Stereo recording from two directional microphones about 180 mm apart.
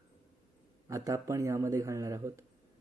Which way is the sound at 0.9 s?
15° right (ahead or behind).